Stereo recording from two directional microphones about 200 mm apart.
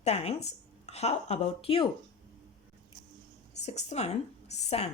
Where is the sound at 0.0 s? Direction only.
30° left (ahead or behind).